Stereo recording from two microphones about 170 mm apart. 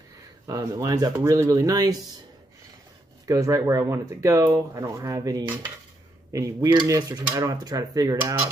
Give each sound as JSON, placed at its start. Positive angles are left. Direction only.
{"t": 0.5, "sound": "speech", "side_deg": -20}
{"t": 3.3, "sound": "speech", "side_deg": -20}